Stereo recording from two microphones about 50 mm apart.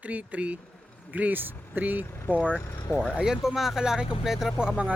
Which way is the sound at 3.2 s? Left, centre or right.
Centre.